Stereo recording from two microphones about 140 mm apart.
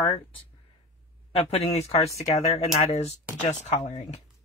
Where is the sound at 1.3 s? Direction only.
50° left (ahead or behind).